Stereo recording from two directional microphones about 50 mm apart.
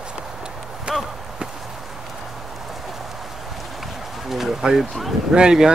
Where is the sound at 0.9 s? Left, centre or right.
Centre.